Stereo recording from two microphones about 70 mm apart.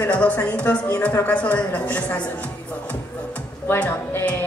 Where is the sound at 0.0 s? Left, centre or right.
Left.